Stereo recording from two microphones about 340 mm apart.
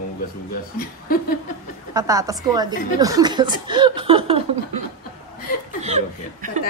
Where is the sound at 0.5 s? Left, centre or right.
Left.